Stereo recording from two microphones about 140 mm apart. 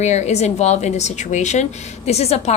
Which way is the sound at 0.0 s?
55° left (ahead or behind).